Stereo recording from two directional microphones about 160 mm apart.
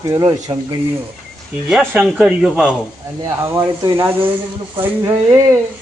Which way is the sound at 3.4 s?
20° right (ahead or behind).